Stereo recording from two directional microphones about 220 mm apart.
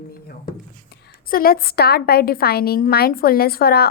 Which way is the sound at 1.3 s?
45° left (ahead or behind).